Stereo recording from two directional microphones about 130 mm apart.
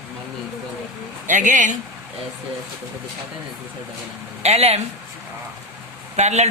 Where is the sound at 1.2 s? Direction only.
75° right (ahead or behind).